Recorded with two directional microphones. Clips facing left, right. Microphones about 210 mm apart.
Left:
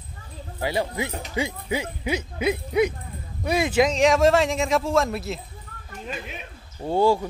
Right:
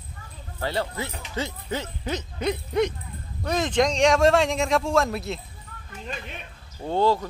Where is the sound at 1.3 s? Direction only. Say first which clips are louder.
Left 3 dB; 10° left (ahead or behind).